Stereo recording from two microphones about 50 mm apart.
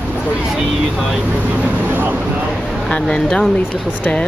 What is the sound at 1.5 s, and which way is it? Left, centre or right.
Vehicle, right.